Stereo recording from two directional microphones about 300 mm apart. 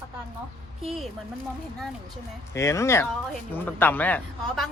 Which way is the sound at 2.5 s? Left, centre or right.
Centre.